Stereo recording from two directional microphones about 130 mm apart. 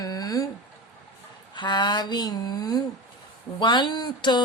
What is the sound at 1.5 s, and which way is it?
Speech, 35° left (ahead or behind).